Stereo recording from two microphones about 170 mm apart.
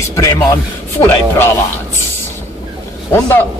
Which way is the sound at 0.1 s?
15° left (ahead or behind).